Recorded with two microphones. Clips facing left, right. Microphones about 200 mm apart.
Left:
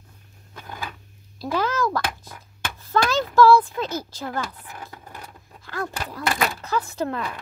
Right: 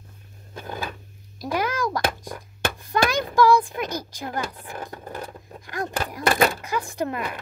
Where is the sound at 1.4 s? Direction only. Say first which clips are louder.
Left 1 dB; 15° right (ahead or behind).